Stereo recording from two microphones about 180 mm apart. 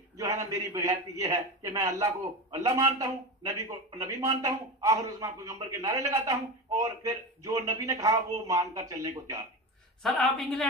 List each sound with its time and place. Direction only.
0.2 s a man's voice: 15° right (ahead or behind)
10.3 s a woman's voice: 5° left (ahead or behind)